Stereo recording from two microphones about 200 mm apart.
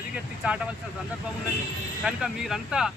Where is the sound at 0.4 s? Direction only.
5° right (ahead or behind).